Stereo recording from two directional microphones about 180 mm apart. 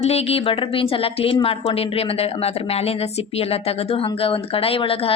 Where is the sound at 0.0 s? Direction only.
35° left (ahead or behind).